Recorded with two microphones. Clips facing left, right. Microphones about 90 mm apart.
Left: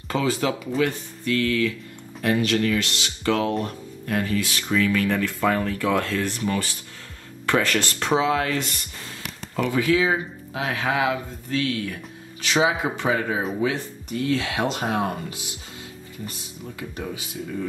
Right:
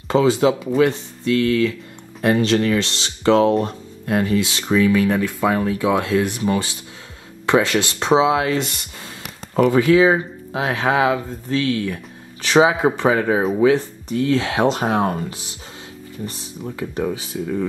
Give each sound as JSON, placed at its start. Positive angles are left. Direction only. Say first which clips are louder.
{"t": 0.1, "sound": "speech", "louder": "right 8 dB", "side_deg": -20}
{"t": 2.2, "sound": "speech", "louder": "right 5 dB", "side_deg": -30}
{"t": 9.6, "sound": "speech", "louder": "right 7 dB", "side_deg": -35}